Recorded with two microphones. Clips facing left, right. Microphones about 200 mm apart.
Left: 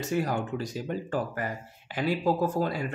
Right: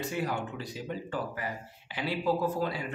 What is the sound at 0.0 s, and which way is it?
Speech, 45° left (ahead or behind).